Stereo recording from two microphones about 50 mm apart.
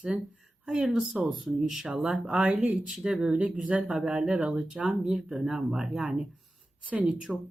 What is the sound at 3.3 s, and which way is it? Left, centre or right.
Speech, right.